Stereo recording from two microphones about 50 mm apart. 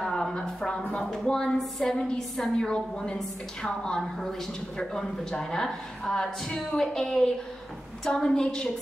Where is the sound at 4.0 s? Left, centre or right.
Centre.